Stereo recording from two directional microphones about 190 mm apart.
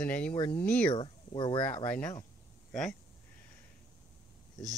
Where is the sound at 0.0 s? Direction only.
5° left (ahead or behind).